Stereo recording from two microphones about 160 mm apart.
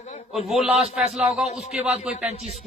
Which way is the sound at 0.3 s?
Centre (ahead or behind).